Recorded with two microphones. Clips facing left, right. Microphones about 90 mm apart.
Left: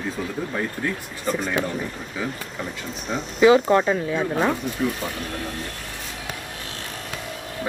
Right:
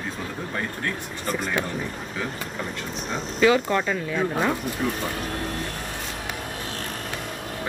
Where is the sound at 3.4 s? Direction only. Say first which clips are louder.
Left 5 dB; 15° left (ahead or behind).